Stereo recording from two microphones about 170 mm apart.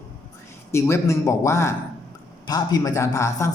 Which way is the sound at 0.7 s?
15° left (ahead or behind).